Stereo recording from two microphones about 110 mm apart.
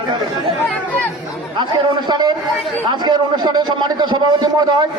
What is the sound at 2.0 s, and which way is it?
A man's voice, 40° right (ahead or behind).